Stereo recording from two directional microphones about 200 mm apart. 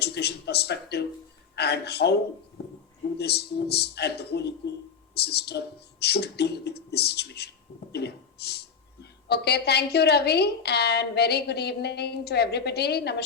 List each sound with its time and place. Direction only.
0.0 s a woman's voice: 55° left (ahead or behind)
3.2 s a woman's voice: 55° left (ahead or behind)